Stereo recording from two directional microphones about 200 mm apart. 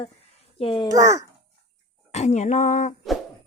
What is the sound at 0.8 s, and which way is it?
Speech, 15° right (ahead or behind).